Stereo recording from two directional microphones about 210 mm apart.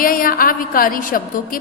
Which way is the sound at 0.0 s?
45° left (ahead or behind).